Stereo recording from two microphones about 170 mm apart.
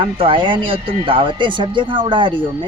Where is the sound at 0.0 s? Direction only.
30° right (ahead or behind).